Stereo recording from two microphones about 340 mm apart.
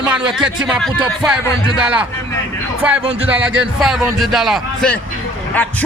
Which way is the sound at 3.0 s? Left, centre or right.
Centre.